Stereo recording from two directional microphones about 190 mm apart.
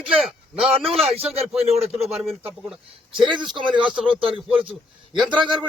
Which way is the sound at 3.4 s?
25° right (ahead or behind).